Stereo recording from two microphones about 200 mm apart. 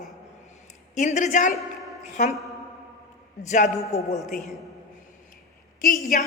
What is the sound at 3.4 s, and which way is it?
Speech, 35° left (ahead or behind).